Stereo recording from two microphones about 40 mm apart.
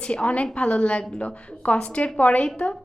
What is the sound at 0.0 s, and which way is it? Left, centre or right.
A woman's voice, left.